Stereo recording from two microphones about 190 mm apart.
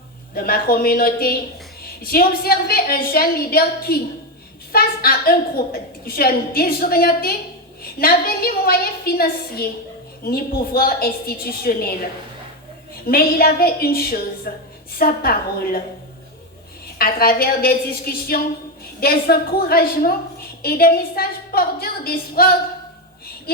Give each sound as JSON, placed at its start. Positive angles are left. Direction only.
{"t": 0.3, "sound": "a woman's voice", "side_deg": 50}
{"t": 17.0, "sound": "a woman's voice", "side_deg": 50}